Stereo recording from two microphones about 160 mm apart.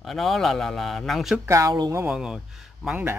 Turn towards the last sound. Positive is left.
turn(degrees=-5)  # may be behind; listen again after turning